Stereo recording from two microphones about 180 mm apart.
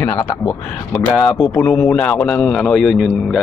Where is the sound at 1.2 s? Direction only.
Centre (ahead or behind).